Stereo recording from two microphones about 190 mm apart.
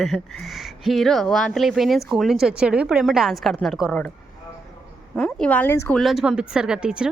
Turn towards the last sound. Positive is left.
turn(degrees=-5)  # may be behind; listen again after turning